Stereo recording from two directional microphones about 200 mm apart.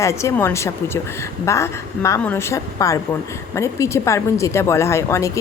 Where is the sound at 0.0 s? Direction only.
15° left (ahead or behind).